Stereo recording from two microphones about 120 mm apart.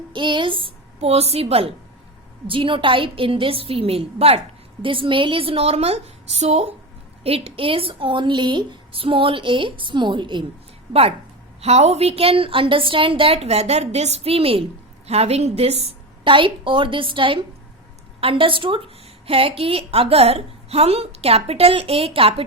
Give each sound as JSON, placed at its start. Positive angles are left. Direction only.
{"t": 0.1, "sound": "a woman's voice", "side_deg": -40}
{"t": 0.9, "sound": "a woman's voice", "side_deg": -60}
{"t": 11.6, "sound": "a woman's voice", "side_deg": -60}